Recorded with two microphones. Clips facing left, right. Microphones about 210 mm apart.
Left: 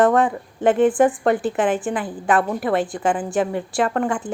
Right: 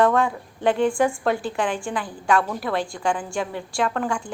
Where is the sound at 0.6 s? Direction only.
5° left (ahead or behind).